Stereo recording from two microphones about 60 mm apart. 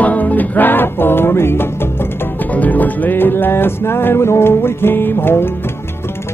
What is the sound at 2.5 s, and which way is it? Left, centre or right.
Music, left.